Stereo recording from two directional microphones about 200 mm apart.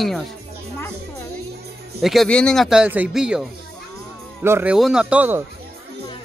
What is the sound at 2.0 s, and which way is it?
Speech, centre (ahead or behind).